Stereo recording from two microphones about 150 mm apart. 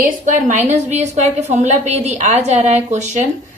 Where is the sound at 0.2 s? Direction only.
55° right (ahead or behind).